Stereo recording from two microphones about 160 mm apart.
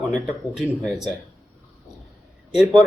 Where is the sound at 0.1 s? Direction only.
5° right (ahead or behind).